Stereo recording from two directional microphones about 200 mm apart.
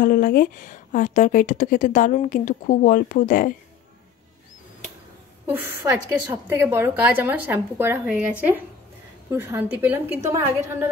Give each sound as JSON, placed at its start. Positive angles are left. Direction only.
{"t": 0.0, "sound": "a woman's voice", "side_deg": 45}
{"t": 5.5, "sound": "a woman's voice", "side_deg": -10}